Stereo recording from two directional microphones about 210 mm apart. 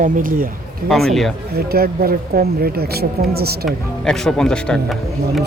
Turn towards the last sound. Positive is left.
turn(degrees=0)  # may be behind; listen again after turning